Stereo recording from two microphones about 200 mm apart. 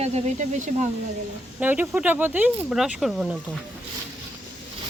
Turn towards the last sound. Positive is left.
turn(degrees=0)  # may be behind; listen again after turning